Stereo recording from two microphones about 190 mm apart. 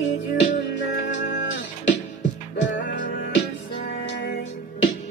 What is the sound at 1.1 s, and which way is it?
Music, 80° left.